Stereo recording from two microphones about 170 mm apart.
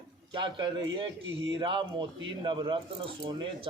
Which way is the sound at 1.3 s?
90° right.